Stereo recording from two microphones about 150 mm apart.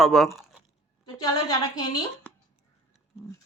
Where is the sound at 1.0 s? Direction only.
25° left (ahead or behind).